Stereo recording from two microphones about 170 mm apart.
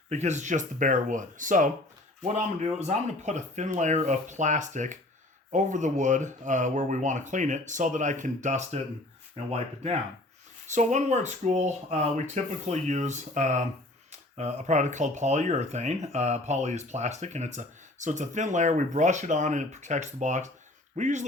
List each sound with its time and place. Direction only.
0.1 s speech: 45° right (ahead or behind)